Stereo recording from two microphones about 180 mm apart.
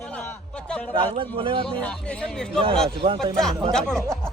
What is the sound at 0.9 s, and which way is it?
Speech, 30° right (ahead or behind).